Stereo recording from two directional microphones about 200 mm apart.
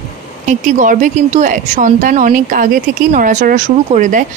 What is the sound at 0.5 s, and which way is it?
Speech, 40° right (ahead or behind).